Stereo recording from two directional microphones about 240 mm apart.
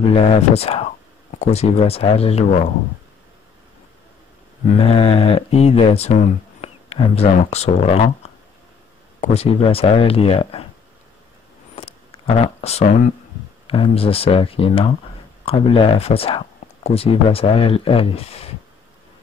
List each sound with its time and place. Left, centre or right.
0.1 s speech: left
4.8 s speech: left
11.7 s a sound: left
13.7 s speech: left